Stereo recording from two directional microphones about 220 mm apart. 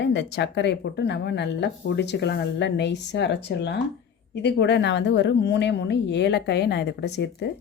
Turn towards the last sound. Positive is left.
turn(degrees=50)  # may be behind; listen again after turning